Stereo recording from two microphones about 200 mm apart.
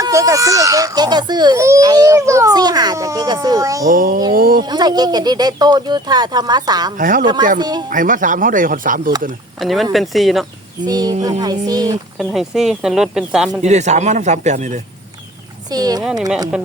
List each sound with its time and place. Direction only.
0.0 s a child's voice: 15° right (ahead or behind)
3.8 s speech: 45° right (ahead or behind)
4.6 s speech: 20° right (ahead or behind)
6.9 s speech: 40° right (ahead or behind)
7.6 s speech: 20° right (ahead or behind)
7.9 s speech: 40° right (ahead or behind)
9.6 s speech: centre (ahead or behind)
10.8 s speech: 20° right (ahead or behind)
12.1 s speech: centre (ahead or behind)
13.6 s speech: 35° right (ahead or behind)
15.7 s speech: 20° right (ahead or behind)